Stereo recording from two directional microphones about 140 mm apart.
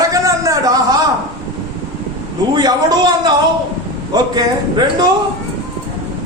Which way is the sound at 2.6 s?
30° right (ahead or behind).